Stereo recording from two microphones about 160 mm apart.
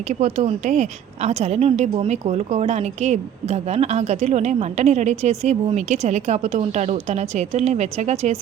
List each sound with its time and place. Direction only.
0.1 s a woman's voice: 45° right (ahead or behind)